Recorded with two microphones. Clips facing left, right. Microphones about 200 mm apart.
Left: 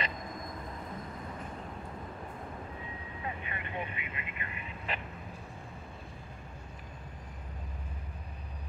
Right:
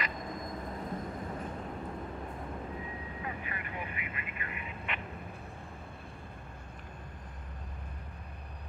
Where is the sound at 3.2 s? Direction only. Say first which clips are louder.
Left 3 dB; 25° left (ahead or behind).